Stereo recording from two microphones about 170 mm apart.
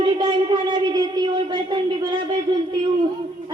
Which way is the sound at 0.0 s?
30° right (ahead or behind).